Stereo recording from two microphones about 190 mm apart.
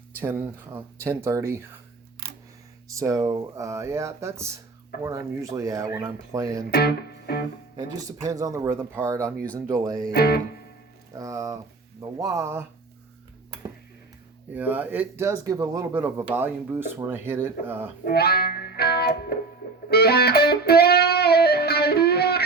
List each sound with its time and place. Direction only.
0.2 s speech: 10° right (ahead or behind)
2.2 s camera: 55° right (ahead or behind)
2.9 s speech: 15° right (ahead or behind)
6.7 s music: 55° left (ahead or behind)
7.8 s speech: 20° right (ahead or behind)
10.1 s speech: 55° left (ahead or behind)
11.1 s speech: 15° right (ahead or behind)
14.5 s speech: 10° right (ahead or behind)
18.0 s speech: 55° left (ahead or behind)
19.9 s music: 55° left (ahead or behind)